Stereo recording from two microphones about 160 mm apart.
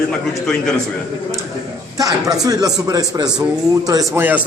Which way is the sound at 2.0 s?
20° right (ahead or behind).